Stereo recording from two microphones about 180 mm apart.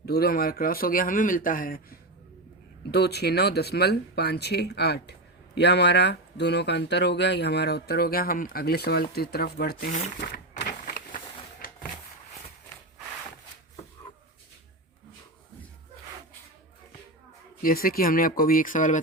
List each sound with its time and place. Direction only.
0.0 s speech: 60° left (ahead or behind)
2.9 s speech: 65° left (ahead or behind)
10.2 s a sound: 60° left (ahead or behind)
17.6 s speech: 55° left (ahead or behind)